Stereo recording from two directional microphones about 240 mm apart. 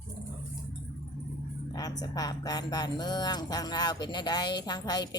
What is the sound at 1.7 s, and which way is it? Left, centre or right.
Speech, centre.